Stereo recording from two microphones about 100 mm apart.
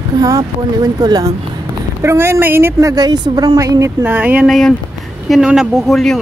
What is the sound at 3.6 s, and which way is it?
Speech, 35° right (ahead or behind).